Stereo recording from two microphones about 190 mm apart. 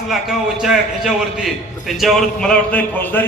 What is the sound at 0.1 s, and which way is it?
A man's voice, centre (ahead or behind).